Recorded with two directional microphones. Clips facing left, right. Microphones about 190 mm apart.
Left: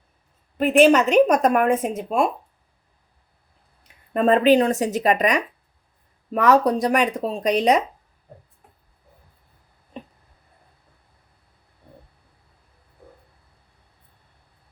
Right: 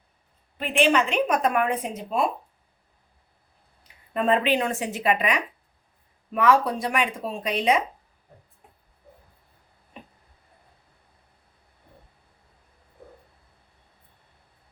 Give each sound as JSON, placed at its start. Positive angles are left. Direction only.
{"t": 0.5, "sound": "a woman's voice", "side_deg": 45}
{"t": 4.1, "sound": "speech", "side_deg": 40}